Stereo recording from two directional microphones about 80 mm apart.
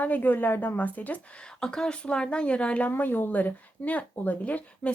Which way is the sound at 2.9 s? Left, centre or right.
Left.